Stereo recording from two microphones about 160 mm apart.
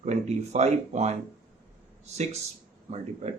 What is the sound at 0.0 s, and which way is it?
Speech, 45° right (ahead or behind).